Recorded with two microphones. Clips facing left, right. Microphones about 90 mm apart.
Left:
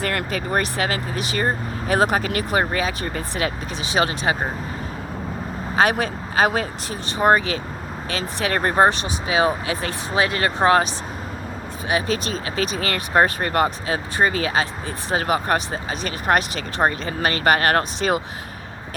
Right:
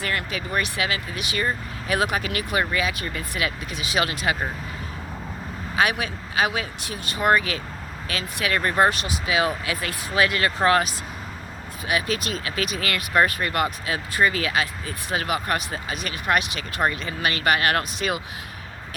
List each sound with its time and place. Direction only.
0.0 s speech: 45° left (ahead or behind); by 4.4 s 30° left (ahead or behind)
5.7 s speech: 40° left (ahead or behind)